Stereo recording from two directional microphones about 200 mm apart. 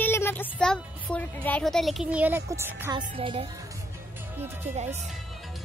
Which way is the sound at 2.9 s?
25° right (ahead or behind).